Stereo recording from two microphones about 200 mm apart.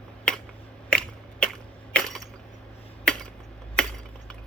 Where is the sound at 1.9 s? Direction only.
Centre (ahead or behind).